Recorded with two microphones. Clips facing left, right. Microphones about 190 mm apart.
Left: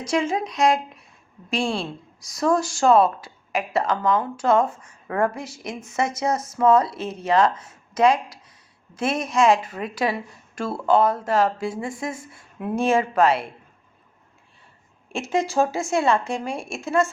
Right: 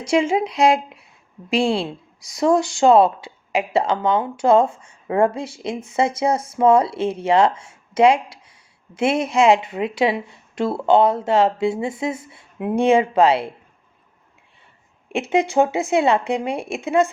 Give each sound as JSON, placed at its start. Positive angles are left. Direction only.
{"t": 0.0, "sound": "a woman's voice", "side_deg": -25}
{"t": 15.4, "sound": "speech", "side_deg": -60}
{"t": 15.8, "sound": "a woman's voice", "side_deg": -20}
{"t": 16.5, "sound": "speech", "side_deg": -60}
{"t": 16.7, "sound": "speech", "side_deg": -20}